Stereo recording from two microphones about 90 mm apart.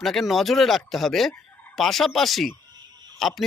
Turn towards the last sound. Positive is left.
turn(degrees=0)  # may be behind; listen again after turning